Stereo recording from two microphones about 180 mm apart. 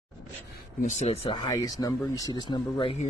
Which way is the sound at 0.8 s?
40° left (ahead or behind).